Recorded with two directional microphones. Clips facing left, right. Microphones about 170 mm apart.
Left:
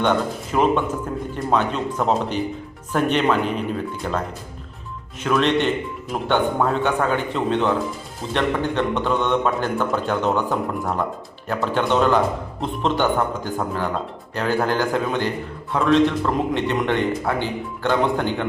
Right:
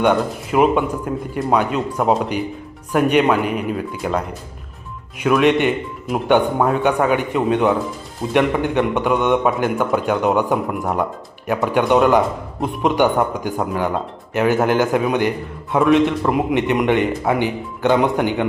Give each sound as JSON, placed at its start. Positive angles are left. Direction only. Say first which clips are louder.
{"t": 0.0, "sound": "a man's voice", "louder": "right 3 dB", "side_deg": -10}
{"t": 5.2, "sound": "a man's voice", "louder": "right 4 dB", "side_deg": -10}